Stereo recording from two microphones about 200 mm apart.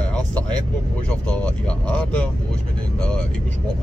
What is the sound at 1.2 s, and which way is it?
Speech, 5° left (ahead or behind).